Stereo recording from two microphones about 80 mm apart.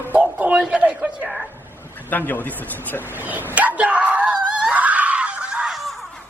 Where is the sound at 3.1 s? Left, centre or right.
Right.